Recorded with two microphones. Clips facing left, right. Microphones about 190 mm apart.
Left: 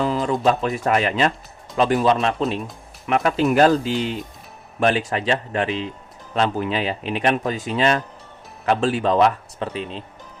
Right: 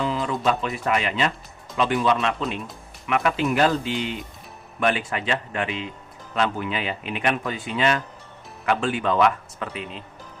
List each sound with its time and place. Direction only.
0.0 s speech: 40° left (ahead or behind)